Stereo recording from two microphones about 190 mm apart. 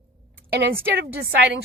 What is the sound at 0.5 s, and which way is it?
Speech, 60° right (ahead or behind).